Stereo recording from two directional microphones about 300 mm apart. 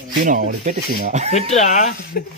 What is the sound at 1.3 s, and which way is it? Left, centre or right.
Speech, left.